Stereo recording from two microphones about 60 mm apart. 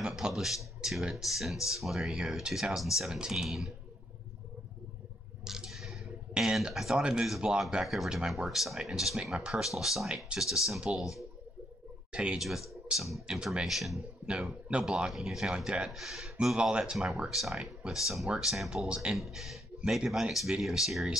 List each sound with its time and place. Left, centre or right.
0.0 s a sound: centre
0.7 s speech: centre
5.4 s a sound: centre
7.0 s speech: centre
7.8 s speech: centre
12.1 s speech: centre
12.4 s speech: centre
14.2 s speech: centre
15.1 s speech: centre
15.9 s speech: centre
17.3 s speech: centre
18.9 s speech: centre
19.1 s speech: centre